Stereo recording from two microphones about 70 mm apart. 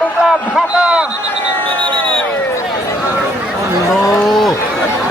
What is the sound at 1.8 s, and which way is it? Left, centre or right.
Speech, centre.